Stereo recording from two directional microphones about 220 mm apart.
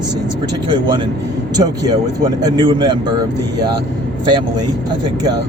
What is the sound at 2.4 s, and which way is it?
Speech, 20° right (ahead or behind).